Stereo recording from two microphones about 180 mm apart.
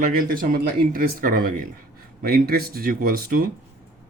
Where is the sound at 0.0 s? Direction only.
55° right (ahead or behind).